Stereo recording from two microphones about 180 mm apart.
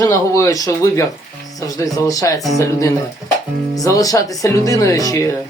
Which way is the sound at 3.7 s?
20° left (ahead or behind).